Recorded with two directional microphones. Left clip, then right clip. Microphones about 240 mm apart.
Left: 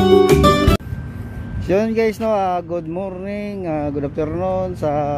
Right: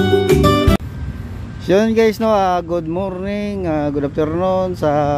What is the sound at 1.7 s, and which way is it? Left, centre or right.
Speech, centre.